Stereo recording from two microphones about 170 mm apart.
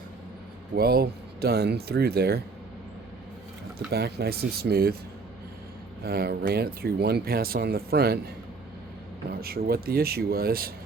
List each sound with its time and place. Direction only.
0.8 s speech: 65° right (ahead or behind)
3.9 s speech: 70° right (ahead or behind)
6.0 s speech: 70° right (ahead or behind)
9.3 s speech: 65° right (ahead or behind)